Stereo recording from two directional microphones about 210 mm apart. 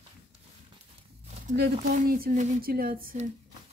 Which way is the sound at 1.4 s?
45° right (ahead or behind).